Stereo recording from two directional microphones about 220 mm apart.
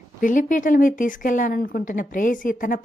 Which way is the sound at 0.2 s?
35° left (ahead or behind).